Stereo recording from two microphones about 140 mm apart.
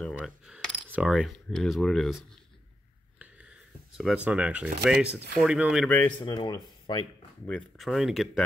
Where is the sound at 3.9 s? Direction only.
5° right (ahead or behind).